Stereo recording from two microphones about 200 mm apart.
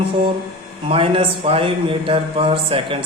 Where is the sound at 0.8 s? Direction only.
25° right (ahead or behind).